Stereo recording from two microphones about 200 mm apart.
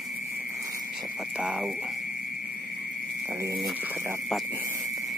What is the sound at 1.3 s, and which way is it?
Frog, 5° right (ahead or behind).